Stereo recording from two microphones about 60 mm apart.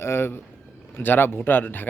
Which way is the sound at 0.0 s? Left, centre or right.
Left.